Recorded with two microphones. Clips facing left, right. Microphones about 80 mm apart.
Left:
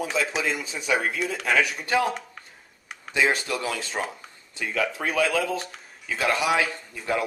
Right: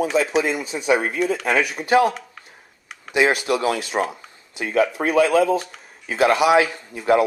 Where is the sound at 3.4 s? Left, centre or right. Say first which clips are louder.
Right 8 dB; right.